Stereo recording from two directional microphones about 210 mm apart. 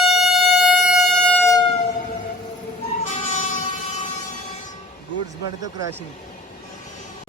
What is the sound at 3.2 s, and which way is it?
Vehicle, 30° left (ahead or behind).